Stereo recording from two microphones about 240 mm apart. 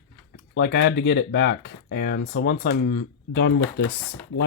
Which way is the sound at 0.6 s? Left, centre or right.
Left.